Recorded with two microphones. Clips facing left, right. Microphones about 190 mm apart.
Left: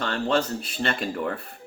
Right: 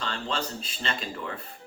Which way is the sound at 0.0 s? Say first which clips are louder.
Left 8 dB; 60° left (ahead or behind).